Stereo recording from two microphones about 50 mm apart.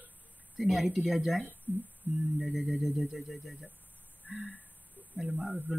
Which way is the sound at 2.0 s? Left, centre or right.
Right.